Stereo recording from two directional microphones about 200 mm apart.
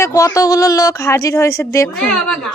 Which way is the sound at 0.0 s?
15° left (ahead or behind).